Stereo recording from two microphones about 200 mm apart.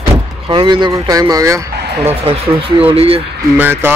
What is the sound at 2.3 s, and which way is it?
Speech, 30° right (ahead or behind).